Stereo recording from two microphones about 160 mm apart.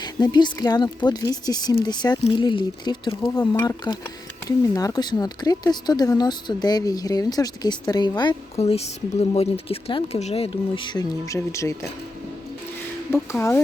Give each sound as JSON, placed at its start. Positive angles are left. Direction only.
{"t": 0.0, "sound": "speech", "side_deg": 25}
{"t": 8.5, "sound": "speech", "side_deg": 40}
{"t": 13.3, "sound": "speech", "side_deg": 15}